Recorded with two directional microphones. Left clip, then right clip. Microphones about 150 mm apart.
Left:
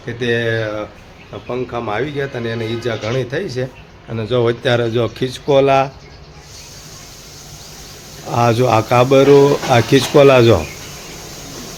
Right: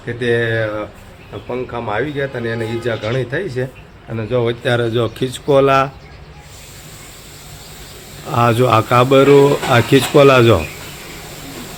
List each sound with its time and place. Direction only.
0.0 s speech: 10° left (ahead or behind)
4.3 s a man's voice: 50° left (ahead or behind)
4.8 s speech: 5° left (ahead or behind)
8.3 s speech: 5° left (ahead or behind)